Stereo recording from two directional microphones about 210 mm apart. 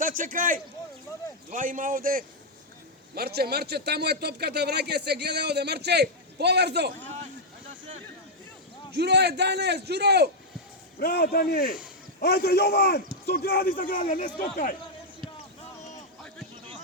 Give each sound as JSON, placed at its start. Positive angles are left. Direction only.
{"t": 0.0, "sound": "a man's voice", "side_deg": -40}
{"t": 9.0, "sound": "a man's voice", "side_deg": -55}
{"t": 11.0, "sound": "a man's voice", "side_deg": 50}